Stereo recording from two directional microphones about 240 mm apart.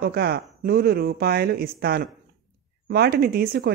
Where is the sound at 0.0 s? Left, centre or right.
Right.